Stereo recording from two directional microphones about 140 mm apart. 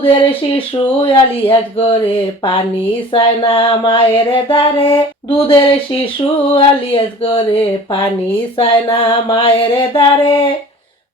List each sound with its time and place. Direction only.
0.0 s music: 40° left (ahead or behind)